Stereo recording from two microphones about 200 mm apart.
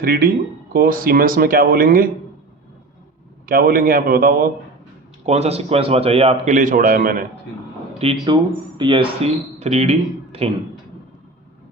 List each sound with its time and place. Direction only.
0.0 s speech: 50° right (ahead or behind)
3.4 s speech: 45° right (ahead or behind)
5.2 s speech: 30° right (ahead or behind)
7.9 s speech: 25° right (ahead or behind)